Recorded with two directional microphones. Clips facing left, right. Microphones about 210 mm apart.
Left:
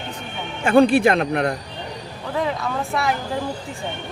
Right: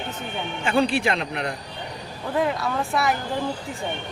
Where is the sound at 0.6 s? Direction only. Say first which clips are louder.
Left 8 dB; 50° left (ahead or behind).